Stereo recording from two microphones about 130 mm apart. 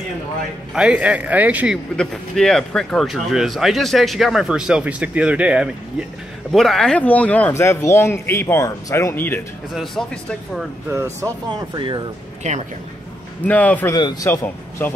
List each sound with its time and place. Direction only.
0.7 s a man's voice: 10° right (ahead or behind)
2.0 s speech: 5° left (ahead or behind)
6.5 s speech: centre (ahead or behind)
10.0 s speech: 5° left (ahead or behind)
10.9 s speech: 20° right (ahead or behind)
11.7 s speech: 35° right (ahead or behind)
12.4 s a woman's voice: 65° right (ahead or behind)
13.5 s speech: 10° left (ahead or behind)